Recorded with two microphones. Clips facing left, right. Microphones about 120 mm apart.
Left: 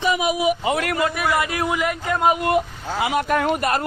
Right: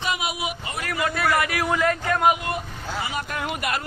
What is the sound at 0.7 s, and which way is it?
Speech, 75° left (ahead or behind).